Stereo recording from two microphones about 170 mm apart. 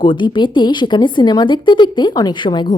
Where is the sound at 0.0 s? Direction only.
30° left (ahead or behind).